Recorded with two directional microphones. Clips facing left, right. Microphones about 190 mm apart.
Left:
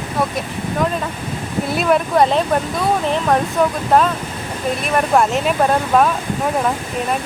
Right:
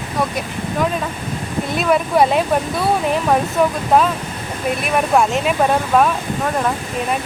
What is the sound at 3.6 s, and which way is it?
Speech, 5° right (ahead or behind).